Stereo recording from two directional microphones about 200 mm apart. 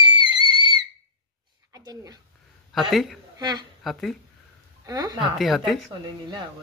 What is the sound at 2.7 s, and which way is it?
Speech, centre (ahead or behind).